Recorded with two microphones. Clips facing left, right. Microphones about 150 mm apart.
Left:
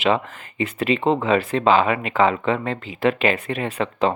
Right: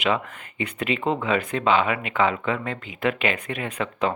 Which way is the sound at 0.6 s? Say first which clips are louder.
Left 5 dB; 30° left (ahead or behind).